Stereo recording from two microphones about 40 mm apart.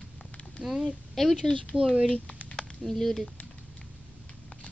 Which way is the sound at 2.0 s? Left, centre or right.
Left.